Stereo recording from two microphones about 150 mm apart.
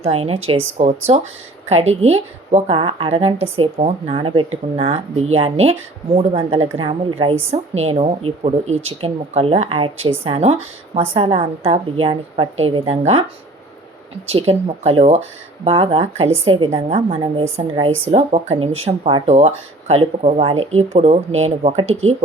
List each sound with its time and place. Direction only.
0.0 s a woman's voice: 40° right (ahead or behind)
14.3 s a woman's voice: 40° right (ahead or behind)